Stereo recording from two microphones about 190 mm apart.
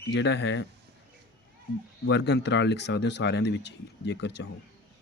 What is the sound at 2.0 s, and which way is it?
Speech, 65° left (ahead or behind).